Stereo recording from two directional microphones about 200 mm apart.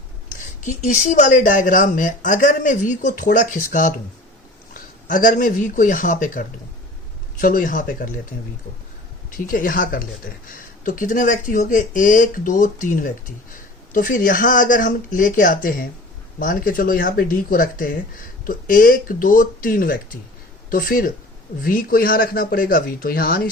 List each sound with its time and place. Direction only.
0.6 s speech: 35° left (ahead or behind)
7.4 s speech: 45° left (ahead or behind)
9.4 s speech: 45° left (ahead or behind)